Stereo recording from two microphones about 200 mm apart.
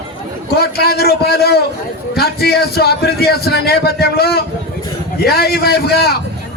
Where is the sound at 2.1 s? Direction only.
50° left (ahead or behind).